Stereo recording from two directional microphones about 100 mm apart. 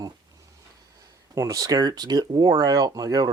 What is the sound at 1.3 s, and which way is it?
Speech, 35° right (ahead or behind).